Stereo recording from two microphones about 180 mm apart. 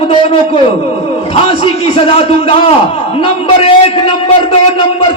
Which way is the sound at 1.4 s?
30° left (ahead or behind).